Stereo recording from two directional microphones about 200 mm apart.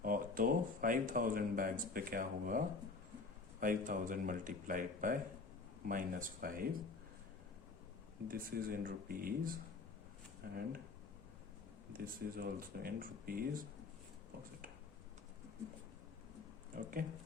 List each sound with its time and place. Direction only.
0.0 s speech: 45° right (ahead or behind)
8.3 s speech: 45° right (ahead or behind)
11.9 s speech: 45° right (ahead or behind)
16.7 s speech: 45° right (ahead or behind)